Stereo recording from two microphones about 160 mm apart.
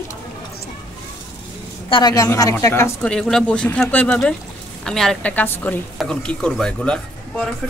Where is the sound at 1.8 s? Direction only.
35° left (ahead or behind).